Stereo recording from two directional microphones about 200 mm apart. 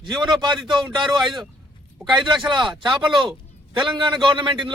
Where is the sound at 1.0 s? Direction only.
Centre (ahead or behind).